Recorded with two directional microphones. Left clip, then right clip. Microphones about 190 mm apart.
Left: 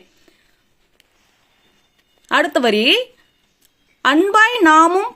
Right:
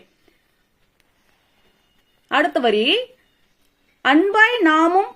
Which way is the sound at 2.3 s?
40° left (ahead or behind).